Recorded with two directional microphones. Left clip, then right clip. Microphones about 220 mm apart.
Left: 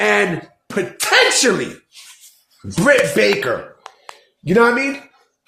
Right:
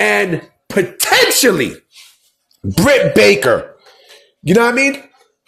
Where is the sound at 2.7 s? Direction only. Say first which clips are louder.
Right 3 dB; 40° right (ahead or behind).